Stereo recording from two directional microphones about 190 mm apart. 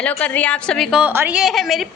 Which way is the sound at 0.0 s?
10° left (ahead or behind).